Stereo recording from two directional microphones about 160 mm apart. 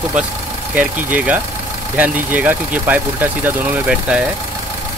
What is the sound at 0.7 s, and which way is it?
Speech, 10° right (ahead or behind).